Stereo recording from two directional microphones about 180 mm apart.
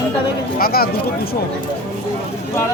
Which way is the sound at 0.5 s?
55° left (ahead or behind).